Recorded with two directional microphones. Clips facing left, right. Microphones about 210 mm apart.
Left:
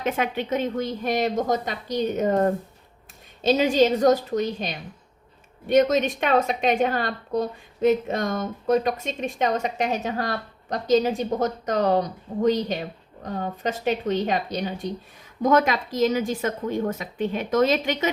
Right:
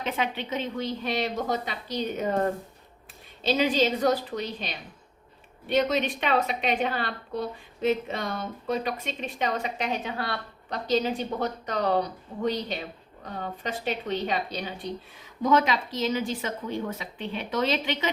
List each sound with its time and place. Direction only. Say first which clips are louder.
0.0 s a woman's voice: left 4 dB; 45° left (ahead or behind)